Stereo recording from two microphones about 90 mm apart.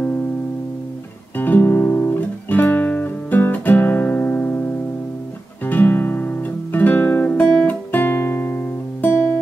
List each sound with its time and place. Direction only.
1.3 s music: 20° left (ahead or behind)
5.7 s guitar: 20° left (ahead or behind)